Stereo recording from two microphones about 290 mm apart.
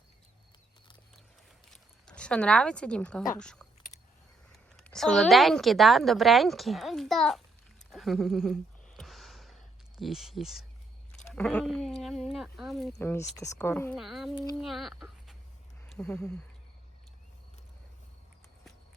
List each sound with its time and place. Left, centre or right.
1.7 s speech: centre
4.8 s a woman's voice: centre
9.0 s a sound: centre
10.0 s a woman's voice: centre